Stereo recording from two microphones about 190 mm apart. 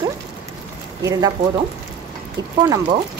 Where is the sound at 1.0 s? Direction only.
20° right (ahead or behind).